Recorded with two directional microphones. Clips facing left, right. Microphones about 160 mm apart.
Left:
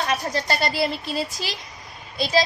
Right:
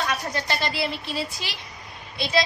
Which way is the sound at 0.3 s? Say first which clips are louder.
Left 3 dB; 40° left (ahead or behind).